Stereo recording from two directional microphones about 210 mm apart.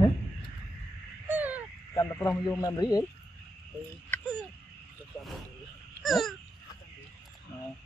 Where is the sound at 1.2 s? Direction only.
5° right (ahead or behind).